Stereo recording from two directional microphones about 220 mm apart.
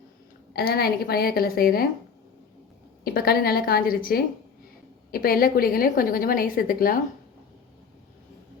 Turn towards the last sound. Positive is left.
turn(degrees=40)  # may be behind; listen again after turning